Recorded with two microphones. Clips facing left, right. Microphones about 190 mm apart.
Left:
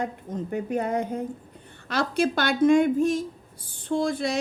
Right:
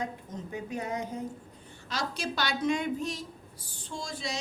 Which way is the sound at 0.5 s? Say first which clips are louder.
Left 8 dB; 55° left (ahead or behind).